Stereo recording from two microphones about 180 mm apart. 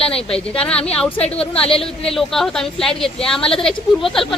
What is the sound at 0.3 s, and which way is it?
Speech, 5° left (ahead or behind).